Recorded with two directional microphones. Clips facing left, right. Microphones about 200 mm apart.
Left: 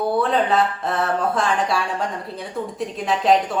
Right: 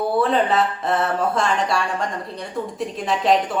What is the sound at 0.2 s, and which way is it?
A woman's voice, centre (ahead or behind).